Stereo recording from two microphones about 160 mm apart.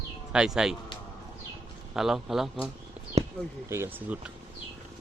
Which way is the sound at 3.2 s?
40° right (ahead or behind).